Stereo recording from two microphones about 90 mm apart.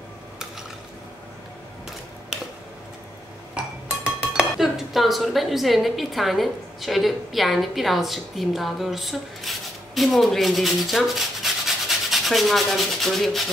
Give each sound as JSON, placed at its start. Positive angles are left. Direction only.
{"t": 3.5, "sound": "speech", "side_deg": -10}